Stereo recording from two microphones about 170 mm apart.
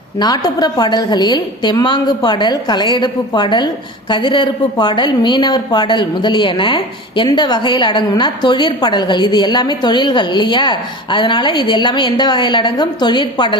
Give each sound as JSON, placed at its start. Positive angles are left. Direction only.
{"t": 0.2, "sound": "speech", "side_deg": 25}